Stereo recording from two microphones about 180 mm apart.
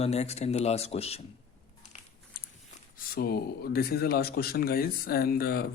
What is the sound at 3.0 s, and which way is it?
Speech, 60° left (ahead or behind).